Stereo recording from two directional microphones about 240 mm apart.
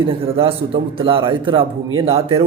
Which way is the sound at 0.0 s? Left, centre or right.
Right.